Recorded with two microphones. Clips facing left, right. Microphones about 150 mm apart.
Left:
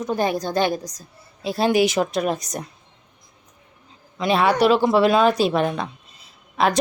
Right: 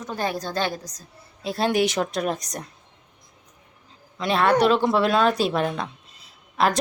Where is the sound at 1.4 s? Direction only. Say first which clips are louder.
Left 3 dB; 5° left (ahead or behind).